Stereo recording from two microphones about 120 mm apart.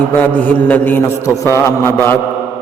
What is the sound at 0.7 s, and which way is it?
A man's voice, 15° left (ahead or behind).